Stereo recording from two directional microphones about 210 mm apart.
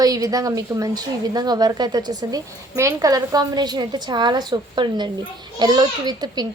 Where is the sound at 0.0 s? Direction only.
15° right (ahead or behind).